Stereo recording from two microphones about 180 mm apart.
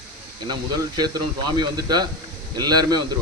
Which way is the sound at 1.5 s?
25° right (ahead or behind).